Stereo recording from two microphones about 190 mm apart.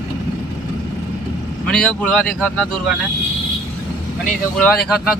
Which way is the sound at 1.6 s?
5° left (ahead or behind).